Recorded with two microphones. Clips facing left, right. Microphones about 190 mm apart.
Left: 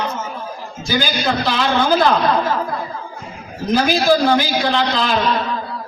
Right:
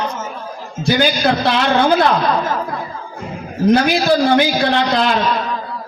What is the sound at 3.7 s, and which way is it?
Speech, 60° right (ahead or behind).